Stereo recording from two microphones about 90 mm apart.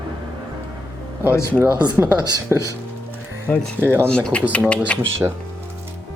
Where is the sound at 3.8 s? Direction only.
25° right (ahead or behind).